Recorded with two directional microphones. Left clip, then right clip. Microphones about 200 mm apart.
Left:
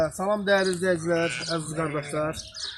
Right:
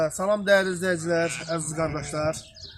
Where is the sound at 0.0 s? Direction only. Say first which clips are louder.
Right 1 dB; 15° right (ahead or behind).